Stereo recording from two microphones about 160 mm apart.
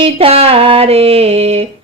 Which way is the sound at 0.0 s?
40° right (ahead or behind).